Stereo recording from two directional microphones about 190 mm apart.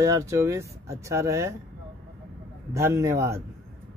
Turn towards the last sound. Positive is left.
turn(degrees=-15)  # may be behind; listen again after turning